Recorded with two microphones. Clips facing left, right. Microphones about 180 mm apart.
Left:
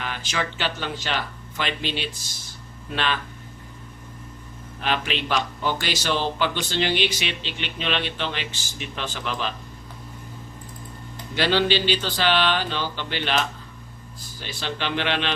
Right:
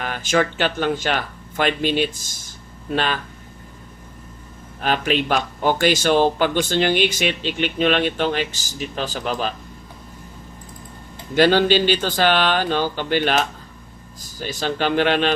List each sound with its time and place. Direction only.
0.0 s a man's voice: 45° right (ahead or behind)
4.8 s a man's voice: 45° right (ahead or behind)
11.3 s a man's voice: 45° right (ahead or behind)